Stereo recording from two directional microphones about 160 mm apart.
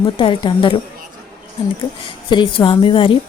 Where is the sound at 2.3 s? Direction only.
30° left (ahead or behind).